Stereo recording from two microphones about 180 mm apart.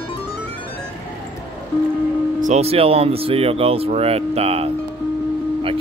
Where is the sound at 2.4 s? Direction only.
35° right (ahead or behind).